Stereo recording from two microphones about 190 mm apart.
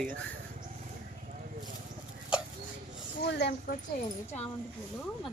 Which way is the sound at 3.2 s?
60° left (ahead or behind).